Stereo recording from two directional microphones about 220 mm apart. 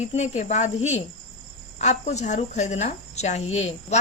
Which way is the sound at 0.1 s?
30° left (ahead or behind).